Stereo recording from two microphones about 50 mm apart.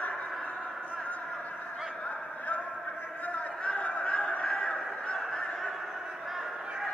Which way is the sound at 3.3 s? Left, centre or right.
Left.